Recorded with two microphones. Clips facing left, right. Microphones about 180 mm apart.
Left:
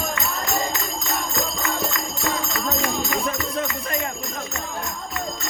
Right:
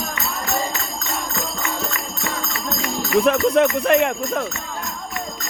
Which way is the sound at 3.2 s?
70° right (ahead or behind).